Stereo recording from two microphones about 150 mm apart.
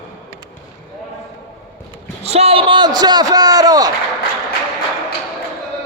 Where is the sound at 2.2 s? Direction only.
45° right (ahead or behind); by 3.9 s 25° right (ahead or behind).